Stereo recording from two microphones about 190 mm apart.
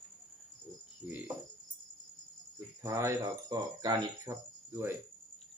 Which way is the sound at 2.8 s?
15° right (ahead or behind).